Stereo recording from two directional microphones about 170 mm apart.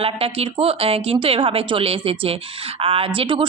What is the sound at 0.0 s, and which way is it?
A woman's voice, 35° right (ahead or behind).